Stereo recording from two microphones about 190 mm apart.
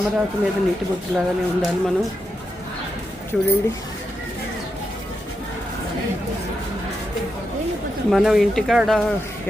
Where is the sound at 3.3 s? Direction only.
Centre (ahead or behind).